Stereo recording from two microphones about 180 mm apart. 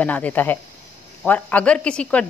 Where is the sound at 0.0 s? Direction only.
10° left (ahead or behind).